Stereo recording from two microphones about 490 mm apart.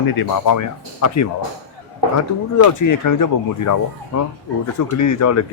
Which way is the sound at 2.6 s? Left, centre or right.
Left.